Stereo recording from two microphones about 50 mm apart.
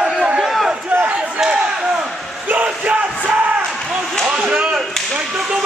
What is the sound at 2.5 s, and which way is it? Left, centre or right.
Music, right.